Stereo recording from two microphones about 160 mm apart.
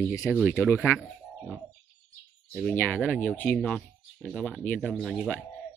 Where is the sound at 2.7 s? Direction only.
10° left (ahead or behind).